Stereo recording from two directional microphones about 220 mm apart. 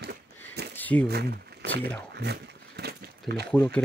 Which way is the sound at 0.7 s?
5° left (ahead or behind).